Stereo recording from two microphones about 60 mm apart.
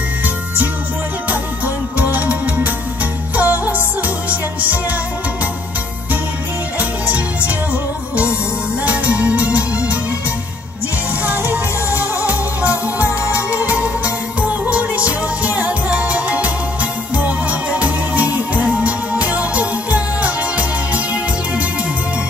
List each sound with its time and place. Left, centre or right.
2.0 s music: right
6.8 s music: right
12.3 s music: right